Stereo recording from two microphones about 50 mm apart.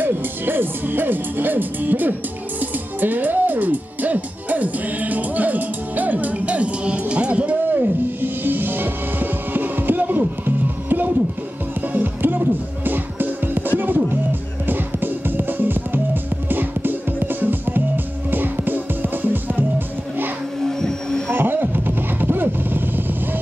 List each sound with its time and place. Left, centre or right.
0.0 s music: right
7.7 s music: right
20.6 s music: centre
21.3 s vehicle: right